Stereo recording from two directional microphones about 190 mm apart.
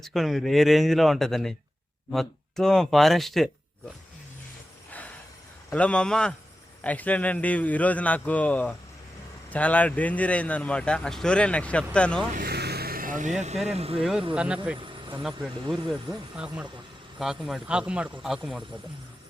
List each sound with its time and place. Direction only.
0.0 s speech: centre (ahead or behind)
4.9 s a sound: 10° left (ahead or behind)
5.7 s speech: 5° left (ahead or behind)
12.4 s vehicle: 55° right (ahead or behind); by 13.6 s 35° right (ahead or behind)
13.7 s speech: 30° right (ahead or behind)
14.0 s speech: centre (ahead or behind)
14.8 s a sound: 25° right (ahead or behind)
15.2 s speech: centre (ahead or behind)